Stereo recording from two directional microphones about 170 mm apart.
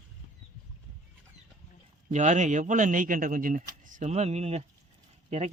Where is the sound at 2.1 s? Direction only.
45° right (ahead or behind).